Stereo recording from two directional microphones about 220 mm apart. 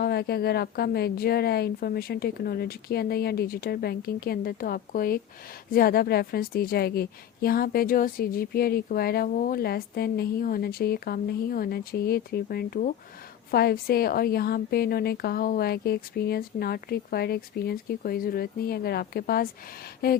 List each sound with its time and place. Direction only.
0.0 s a woman's voice: 45° left (ahead or behind)